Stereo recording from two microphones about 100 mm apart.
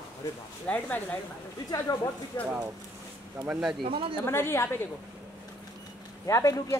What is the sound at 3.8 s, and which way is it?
Speech, 65° right (ahead or behind).